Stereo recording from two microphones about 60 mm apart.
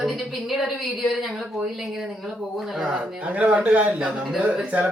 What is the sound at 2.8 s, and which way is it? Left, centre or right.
Speech, centre.